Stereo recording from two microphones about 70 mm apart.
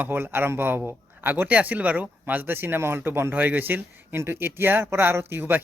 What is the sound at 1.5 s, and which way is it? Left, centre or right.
Speech, right.